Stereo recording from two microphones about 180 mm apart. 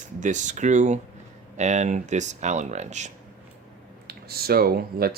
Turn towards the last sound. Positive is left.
turn(degrees=-55)  # may be behind; listen again after turning